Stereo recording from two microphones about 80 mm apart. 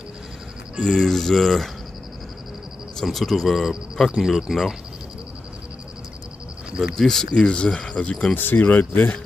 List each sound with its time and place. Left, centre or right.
0.7 s speech: centre
3.0 s speech: centre
7.0 s speech: centre; by 9.1 s left